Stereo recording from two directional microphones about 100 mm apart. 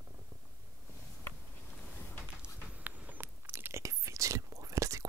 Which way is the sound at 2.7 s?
15° right (ahead or behind).